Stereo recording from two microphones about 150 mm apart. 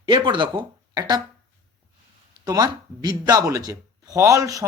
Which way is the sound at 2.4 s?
25° right (ahead or behind).